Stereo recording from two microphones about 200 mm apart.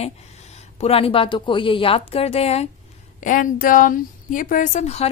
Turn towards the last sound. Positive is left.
turn(degrees=35)  # may be behind; listen again after turning